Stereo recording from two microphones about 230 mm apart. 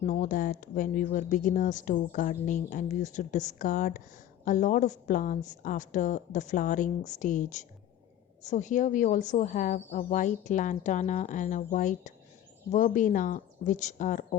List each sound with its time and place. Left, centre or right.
0.0 s speech: left